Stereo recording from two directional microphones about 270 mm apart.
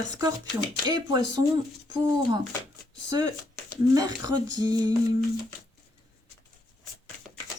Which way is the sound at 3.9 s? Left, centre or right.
Centre.